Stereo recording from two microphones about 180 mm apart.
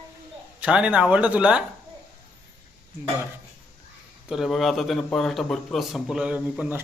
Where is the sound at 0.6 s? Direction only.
5° right (ahead or behind).